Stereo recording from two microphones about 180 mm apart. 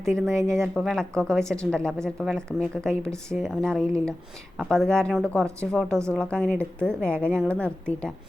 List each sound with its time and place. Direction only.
0.0 s speech: centre (ahead or behind)
0.3 s speech: 15° right (ahead or behind)
0.7 s a woman's voice: 5° left (ahead or behind)